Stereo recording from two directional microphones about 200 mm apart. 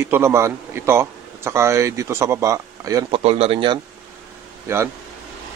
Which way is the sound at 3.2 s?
30° right (ahead or behind).